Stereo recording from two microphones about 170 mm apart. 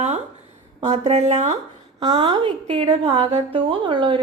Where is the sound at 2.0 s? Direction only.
25° right (ahead or behind).